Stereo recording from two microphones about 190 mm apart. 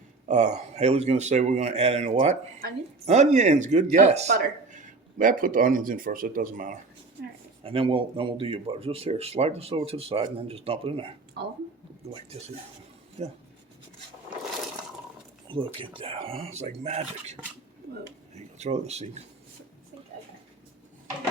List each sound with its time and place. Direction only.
0.3 s a man's voice: 40° right (ahead or behind)
7.6 s speech: 30° right (ahead or behind)
13.2 s a man's voice: 35° right (ahead or behind)
15.4 s speech: 25° right (ahead or behind)
18.3 s speech: 35° right (ahead or behind)